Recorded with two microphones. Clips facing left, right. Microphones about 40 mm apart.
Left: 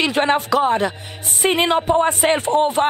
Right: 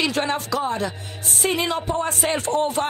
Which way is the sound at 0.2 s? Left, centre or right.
Left.